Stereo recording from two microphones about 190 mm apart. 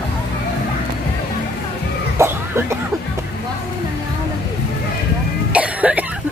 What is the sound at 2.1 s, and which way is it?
Chicken, 15° right (ahead or behind).